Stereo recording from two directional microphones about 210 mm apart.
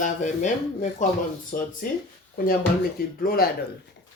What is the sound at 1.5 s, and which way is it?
Speech, 40° left (ahead or behind).